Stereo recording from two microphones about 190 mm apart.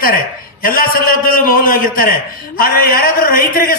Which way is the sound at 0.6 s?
50° left (ahead or behind).